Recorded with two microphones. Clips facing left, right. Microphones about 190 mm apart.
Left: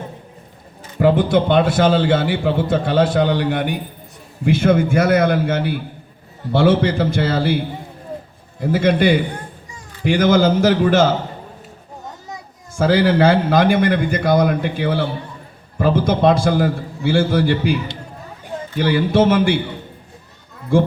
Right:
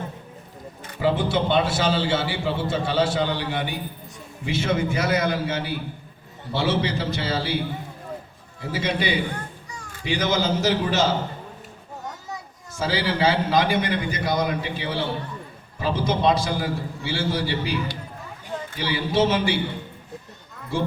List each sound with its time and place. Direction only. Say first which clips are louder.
0.9 s a man's voice: left 7 dB; 50° left (ahead or behind)
8.6 s a man's voice: left 10 dB; 55° left (ahead or behind)
12.7 s a man's voice: left 10 dB; 55° left (ahead or behind)
18.8 s a man's voice: left 7 dB; 55° left (ahead or behind)
20.7 s a man's voice: left 10 dB; 50° left (ahead or behind)